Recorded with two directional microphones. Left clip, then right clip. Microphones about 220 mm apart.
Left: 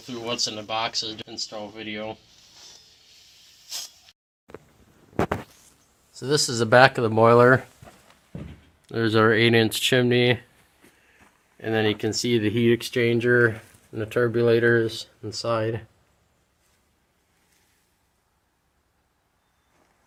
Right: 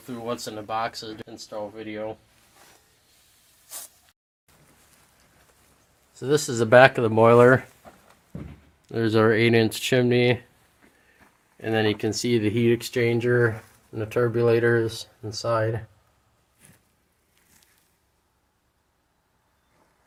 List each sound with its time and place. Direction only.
0.1 s speech: 25° right (ahead or behind)
6.1 s speech: 15° right (ahead or behind)
8.9 s speech: 10° right (ahead or behind)